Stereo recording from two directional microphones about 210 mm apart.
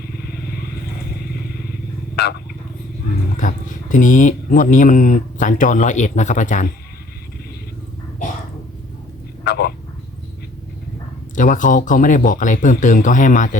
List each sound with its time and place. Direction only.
3.3 s speech: 35° left (ahead or behind)
9.4 s a sound: 50° left (ahead or behind)
11.3 s speech: 40° left (ahead or behind)